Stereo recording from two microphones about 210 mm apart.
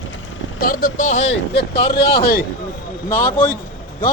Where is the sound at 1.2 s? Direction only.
55° left (ahead or behind).